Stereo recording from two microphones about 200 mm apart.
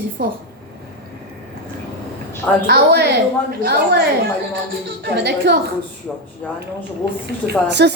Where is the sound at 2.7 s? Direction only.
50° right (ahead or behind).